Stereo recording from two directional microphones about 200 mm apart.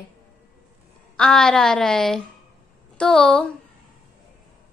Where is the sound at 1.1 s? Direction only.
5° left (ahead or behind).